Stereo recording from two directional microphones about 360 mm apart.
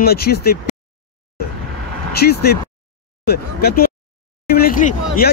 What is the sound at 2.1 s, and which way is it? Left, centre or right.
Speech, left.